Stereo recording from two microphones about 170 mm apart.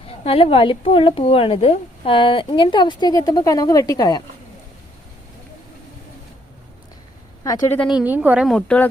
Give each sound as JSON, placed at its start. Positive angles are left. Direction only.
{"t": 0.1, "sound": "a woman's voice", "side_deg": 35}
{"t": 7.4, "sound": "a woman's voice", "side_deg": 20}
{"t": 7.8, "sound": "a woman's voice", "side_deg": -5}
{"t": 8.4, "sound": "speech", "side_deg": 5}